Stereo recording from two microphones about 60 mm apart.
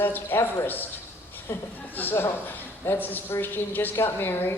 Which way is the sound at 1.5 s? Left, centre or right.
Left.